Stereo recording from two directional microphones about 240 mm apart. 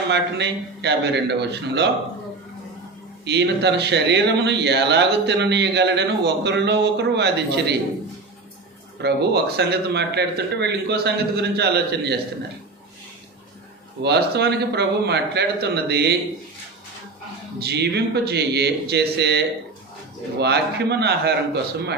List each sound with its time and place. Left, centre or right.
0.1 s a man's voice: right
3.2 s a man's voice: right
9.0 s a man's voice: right
14.0 s a man's voice: right
17.6 s a man's voice: right
20.4 s a man's voice: right